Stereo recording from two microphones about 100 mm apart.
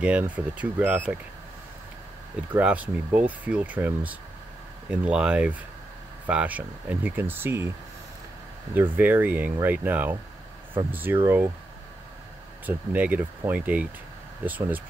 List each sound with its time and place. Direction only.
0.0 s speech: 15° right (ahead or behind)
2.5 s speech: 15° right (ahead or behind)
8.7 s speech: 20° right (ahead or behind)
12.6 s speech: 15° right (ahead or behind)